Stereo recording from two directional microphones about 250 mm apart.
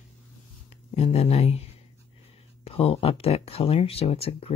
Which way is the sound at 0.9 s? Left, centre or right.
Left.